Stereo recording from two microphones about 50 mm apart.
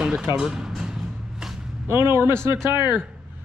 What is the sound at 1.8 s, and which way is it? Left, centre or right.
Speech, right.